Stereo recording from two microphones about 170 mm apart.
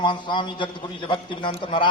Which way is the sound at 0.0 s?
30° left (ahead or behind).